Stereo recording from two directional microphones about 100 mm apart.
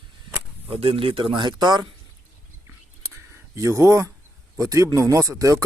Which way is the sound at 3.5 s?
30° right (ahead or behind).